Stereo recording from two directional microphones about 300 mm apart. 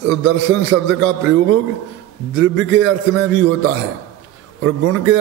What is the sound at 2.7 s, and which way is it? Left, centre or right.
Speech, right.